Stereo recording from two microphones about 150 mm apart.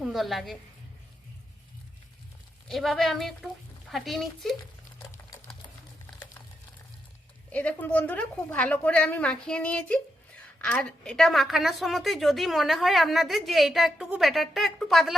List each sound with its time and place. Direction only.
0.0 s a woman's voice: centre (ahead or behind)
2.6 s a woman's voice: centre (ahead or behind)
7.5 s a woman's voice: 10° left (ahead or behind)